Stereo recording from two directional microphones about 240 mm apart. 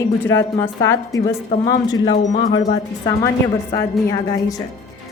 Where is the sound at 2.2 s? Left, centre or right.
Left.